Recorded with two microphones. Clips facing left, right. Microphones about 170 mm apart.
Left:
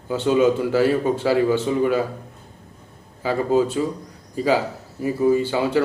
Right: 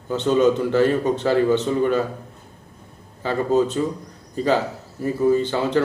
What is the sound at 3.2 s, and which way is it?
A man's voice, 10° left (ahead or behind).